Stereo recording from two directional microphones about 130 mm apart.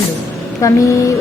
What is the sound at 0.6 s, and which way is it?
Speech, 25° left (ahead or behind).